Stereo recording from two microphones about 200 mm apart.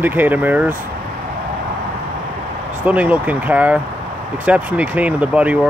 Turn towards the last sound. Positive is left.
turn(degrees=-5)  # may be behind; listen again after turning